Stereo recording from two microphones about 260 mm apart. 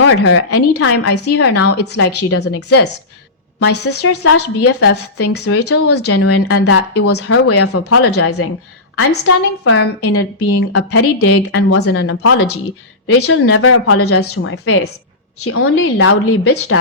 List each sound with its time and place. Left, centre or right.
0.0 s a woman's voice: left
2.4 s speech: left
4.0 s a woman's voice: left